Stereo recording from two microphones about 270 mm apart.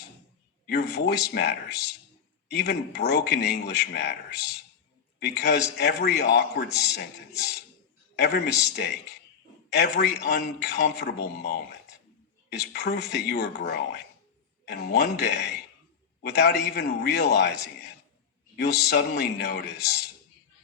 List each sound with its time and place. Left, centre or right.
0.7 s speech: left